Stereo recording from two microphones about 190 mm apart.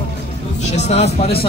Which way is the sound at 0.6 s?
35° left (ahead or behind).